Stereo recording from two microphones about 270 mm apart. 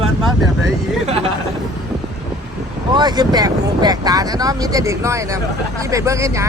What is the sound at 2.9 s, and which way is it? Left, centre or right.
Speech, centre.